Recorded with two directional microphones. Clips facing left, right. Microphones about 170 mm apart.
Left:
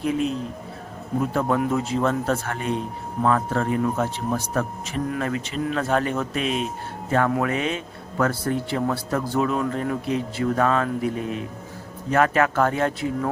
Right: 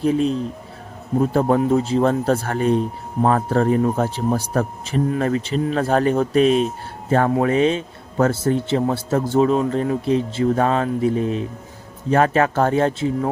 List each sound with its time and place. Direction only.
0.0 s a man's voice: 35° right (ahead or behind)